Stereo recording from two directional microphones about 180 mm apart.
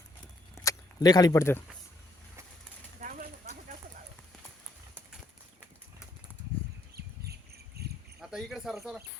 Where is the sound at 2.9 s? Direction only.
45° right (ahead or behind).